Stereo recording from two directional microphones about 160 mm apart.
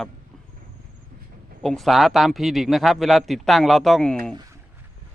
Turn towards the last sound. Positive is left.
turn(degrees=5)  # may be behind; listen again after turning